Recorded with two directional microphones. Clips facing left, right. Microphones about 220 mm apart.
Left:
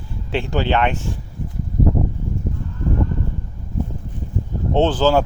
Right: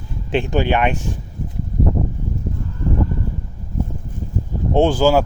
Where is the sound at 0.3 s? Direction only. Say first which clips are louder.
Right 2 dB; 15° right (ahead or behind).